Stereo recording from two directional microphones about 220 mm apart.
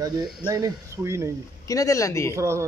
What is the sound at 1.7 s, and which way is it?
Speech, 15° left (ahead or behind).